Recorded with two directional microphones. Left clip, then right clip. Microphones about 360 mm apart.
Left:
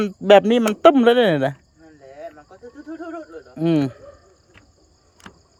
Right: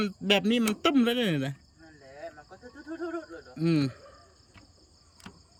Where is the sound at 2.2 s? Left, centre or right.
Left.